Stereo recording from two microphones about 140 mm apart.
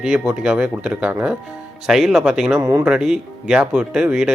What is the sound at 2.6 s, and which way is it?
Speech, 20° right (ahead or behind).